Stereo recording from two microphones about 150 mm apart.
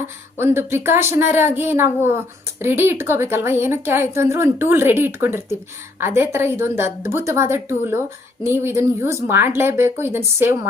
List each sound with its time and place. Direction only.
0.3 s speech: 15° right (ahead or behind)